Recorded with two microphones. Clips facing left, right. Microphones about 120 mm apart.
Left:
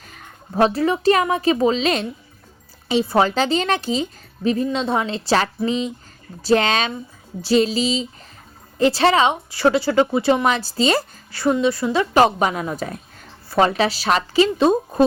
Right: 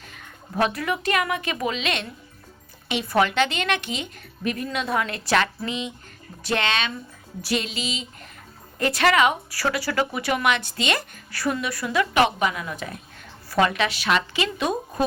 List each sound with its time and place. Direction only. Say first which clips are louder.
0.0 s speech: left 2 dB; 40° left (ahead or behind)